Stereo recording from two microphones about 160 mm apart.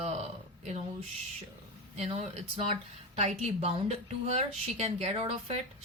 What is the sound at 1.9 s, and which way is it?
Speech, 40° right (ahead or behind).